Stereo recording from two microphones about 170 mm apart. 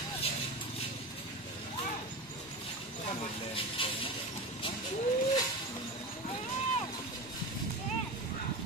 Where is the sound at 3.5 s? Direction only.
30° left (ahead or behind).